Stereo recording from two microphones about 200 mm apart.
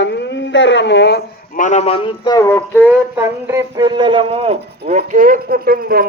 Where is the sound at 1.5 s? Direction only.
40° left (ahead or behind); by 2.6 s 10° left (ahead or behind).